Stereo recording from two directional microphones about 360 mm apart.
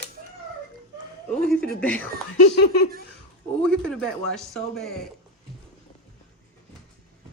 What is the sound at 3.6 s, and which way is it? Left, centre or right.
A man's voice, centre.